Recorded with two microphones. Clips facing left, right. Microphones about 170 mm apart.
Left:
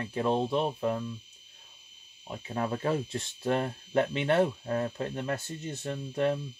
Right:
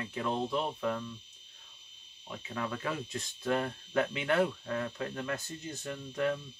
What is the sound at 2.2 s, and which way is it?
Speech, 35° left (ahead or behind).